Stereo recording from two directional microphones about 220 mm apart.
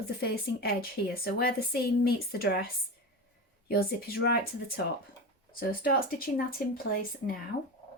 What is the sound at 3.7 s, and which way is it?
A woman's voice, 45° left (ahead or behind).